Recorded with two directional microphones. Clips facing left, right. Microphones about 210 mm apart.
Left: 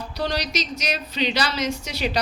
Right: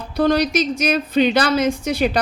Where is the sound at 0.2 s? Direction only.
55° right (ahead or behind).